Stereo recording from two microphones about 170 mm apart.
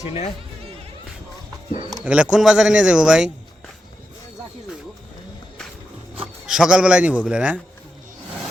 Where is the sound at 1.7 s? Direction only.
25° right (ahead or behind).